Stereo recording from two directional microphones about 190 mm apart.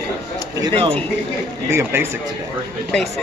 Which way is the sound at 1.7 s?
15° right (ahead or behind).